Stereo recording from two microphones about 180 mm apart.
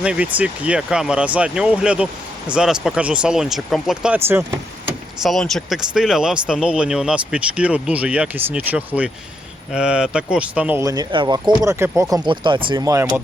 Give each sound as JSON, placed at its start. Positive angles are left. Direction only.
{"t": 0.0, "sound": "speech", "side_deg": -5}
{"t": 5.2, "sound": "speech", "side_deg": 0}